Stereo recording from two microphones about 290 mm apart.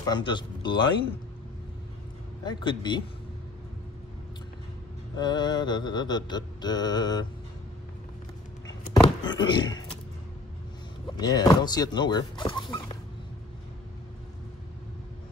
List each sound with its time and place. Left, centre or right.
0.0 s mantra: centre
2.4 s mantra: centre
5.2 s mantra: centre
9.3 s mantra: centre
11.1 s mantra: centre